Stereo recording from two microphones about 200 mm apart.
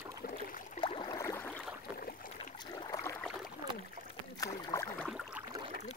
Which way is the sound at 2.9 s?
15° left (ahead or behind).